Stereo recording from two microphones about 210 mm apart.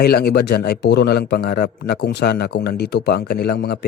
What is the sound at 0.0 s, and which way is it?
A man's voice, 50° left (ahead or behind).